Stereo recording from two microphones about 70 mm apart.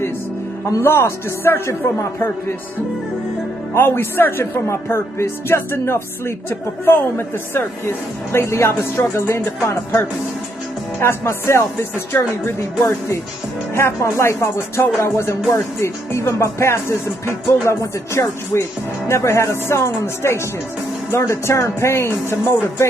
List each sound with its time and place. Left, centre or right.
0.7 s a man's voice: left
3.7 s speech: left
13.7 s speech: left